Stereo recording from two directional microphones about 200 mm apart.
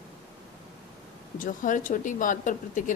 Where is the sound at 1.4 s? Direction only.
40° left (ahead or behind).